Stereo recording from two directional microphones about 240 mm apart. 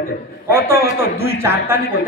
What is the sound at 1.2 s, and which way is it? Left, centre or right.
Speech, centre.